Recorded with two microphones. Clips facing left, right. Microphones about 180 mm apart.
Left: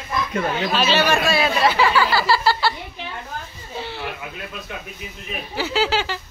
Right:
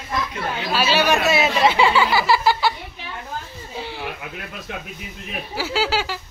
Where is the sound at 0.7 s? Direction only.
10° right (ahead or behind).